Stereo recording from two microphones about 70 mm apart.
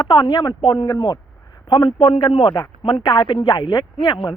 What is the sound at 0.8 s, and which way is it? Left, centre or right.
Speech, left.